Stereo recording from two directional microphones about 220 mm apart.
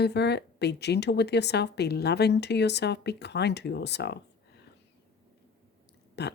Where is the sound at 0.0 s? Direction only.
50° left (ahead or behind).